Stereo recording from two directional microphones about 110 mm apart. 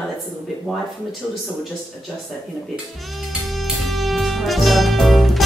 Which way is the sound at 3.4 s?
Centre (ahead or behind).